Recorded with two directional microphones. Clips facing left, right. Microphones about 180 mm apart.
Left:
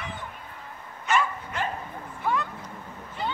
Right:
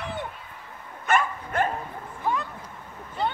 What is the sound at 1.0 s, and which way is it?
Dog, 55° right (ahead or behind).